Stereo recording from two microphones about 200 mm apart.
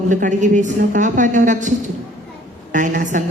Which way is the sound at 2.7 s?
40° right (ahead or behind).